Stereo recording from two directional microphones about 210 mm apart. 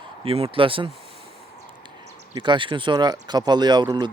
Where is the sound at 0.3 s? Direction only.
25° right (ahead or behind).